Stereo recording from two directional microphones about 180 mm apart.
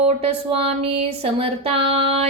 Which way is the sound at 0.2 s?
35° right (ahead or behind).